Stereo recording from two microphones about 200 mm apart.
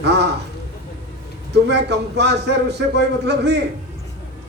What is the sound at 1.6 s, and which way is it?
A man's voice, 60° right (ahead or behind).